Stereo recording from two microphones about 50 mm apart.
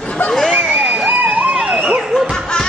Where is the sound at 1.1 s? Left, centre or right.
Right.